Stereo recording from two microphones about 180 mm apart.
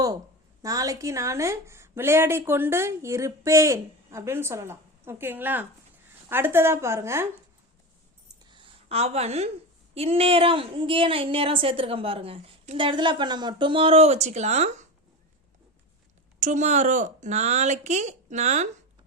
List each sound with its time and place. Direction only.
0.6 s a woman's voice: 20° right (ahead or behind)
8.4 s a sound: 25° right (ahead or behind)
9.9 s a woman's voice: 35° right (ahead or behind)
16.4 s a woman's voice: 40° right (ahead or behind)